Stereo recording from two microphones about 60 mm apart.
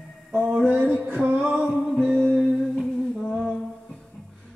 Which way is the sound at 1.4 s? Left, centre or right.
Centre.